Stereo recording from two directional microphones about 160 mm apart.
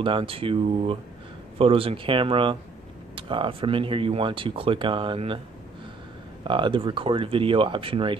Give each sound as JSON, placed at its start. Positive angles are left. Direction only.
{"t": 0.0, "sound": "speech", "side_deg": -35}
{"t": 6.4, "sound": "speech", "side_deg": -30}